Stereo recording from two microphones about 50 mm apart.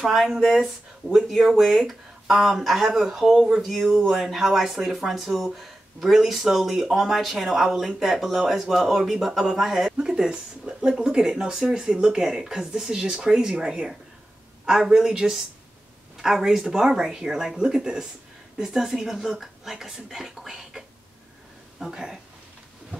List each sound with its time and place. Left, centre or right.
0.1 s speech: centre